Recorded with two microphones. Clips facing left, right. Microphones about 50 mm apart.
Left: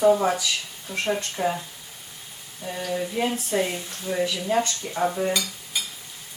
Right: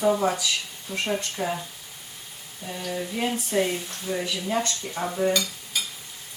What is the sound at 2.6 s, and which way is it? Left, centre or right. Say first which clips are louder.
Speech: left 3 dB; centre.